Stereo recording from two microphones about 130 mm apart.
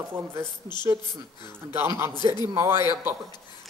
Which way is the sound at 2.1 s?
35° left (ahead or behind).